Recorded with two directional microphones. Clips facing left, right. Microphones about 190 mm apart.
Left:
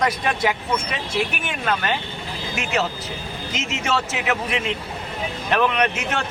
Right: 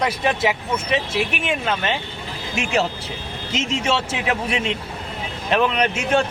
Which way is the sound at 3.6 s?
30° right (ahead or behind).